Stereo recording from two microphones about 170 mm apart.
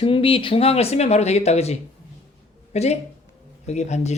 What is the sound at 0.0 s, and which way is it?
Speech, 30° left (ahead or behind).